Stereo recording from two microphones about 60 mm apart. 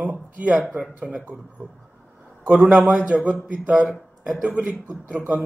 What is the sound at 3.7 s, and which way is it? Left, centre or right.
Speech, centre.